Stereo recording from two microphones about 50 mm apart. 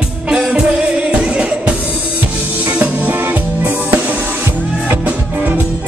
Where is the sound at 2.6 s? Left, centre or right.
Right.